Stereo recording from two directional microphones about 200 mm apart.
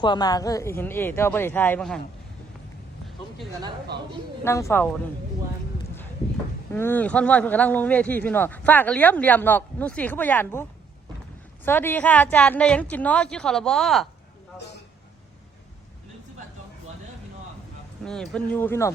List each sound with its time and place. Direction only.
0.0 s speech: 20° left (ahead or behind)
4.4 s speech: 15° left (ahead or behind)
6.7 s speech: 10° left (ahead or behind)
18.0 s speech: 5° left (ahead or behind)